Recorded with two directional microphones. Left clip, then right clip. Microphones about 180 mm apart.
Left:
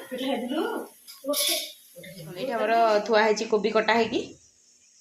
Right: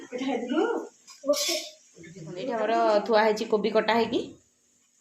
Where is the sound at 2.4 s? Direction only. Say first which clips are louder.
Left 3 dB; 5° right (ahead or behind).